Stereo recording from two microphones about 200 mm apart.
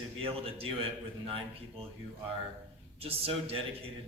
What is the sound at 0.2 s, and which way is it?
Speech, 30° right (ahead or behind).